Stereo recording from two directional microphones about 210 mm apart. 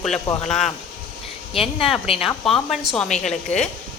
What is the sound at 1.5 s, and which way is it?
Speech, 25° left (ahead or behind).